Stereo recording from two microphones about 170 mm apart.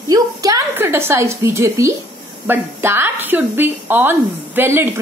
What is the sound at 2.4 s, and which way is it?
A woman's voice, 15° right (ahead or behind).